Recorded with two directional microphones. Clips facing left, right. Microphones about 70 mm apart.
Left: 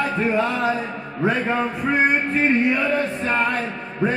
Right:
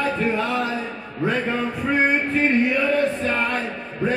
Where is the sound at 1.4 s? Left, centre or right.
Left.